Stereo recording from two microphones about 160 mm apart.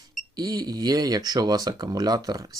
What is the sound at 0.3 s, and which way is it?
Speech, 25° right (ahead or behind).